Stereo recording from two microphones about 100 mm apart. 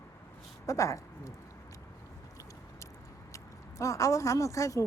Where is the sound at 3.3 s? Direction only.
30° left (ahead or behind).